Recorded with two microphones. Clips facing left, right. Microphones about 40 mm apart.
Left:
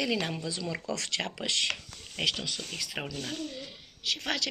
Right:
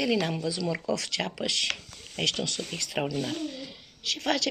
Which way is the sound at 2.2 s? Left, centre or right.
Centre.